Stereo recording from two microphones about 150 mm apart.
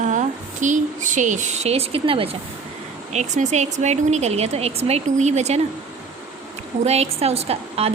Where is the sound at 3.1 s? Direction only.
50° right (ahead or behind).